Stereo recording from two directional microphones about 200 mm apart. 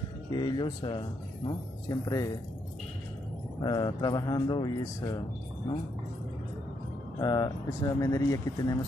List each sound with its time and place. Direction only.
0.3 s speech: 20° left (ahead or behind)
3.6 s speech: 20° left (ahead or behind)
7.2 s speech: 20° left (ahead or behind)